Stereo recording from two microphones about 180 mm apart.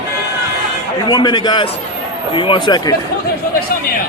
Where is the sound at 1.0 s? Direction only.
25° left (ahead or behind).